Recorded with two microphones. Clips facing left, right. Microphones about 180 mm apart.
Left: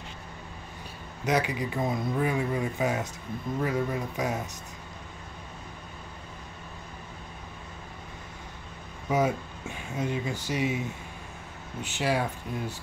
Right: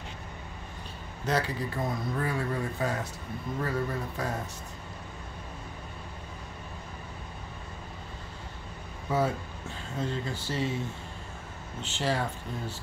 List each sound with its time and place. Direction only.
1.2 s speech: 15° left (ahead or behind)
9.1 s speech: 15° left (ahead or behind)